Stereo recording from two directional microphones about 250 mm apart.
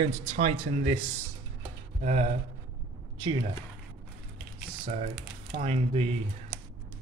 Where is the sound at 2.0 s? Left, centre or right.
Right.